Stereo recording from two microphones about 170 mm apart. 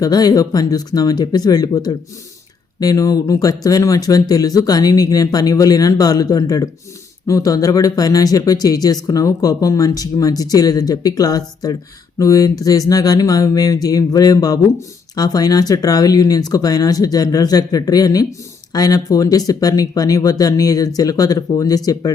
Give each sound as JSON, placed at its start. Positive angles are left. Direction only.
{"t": 0.0, "sound": "speech", "side_deg": 25}